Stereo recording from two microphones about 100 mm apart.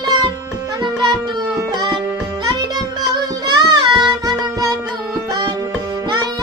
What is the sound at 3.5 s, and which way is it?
Music, 45° right (ahead or behind).